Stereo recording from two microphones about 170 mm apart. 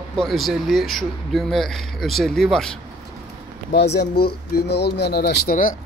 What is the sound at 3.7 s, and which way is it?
Speech, 75° left (ahead or behind).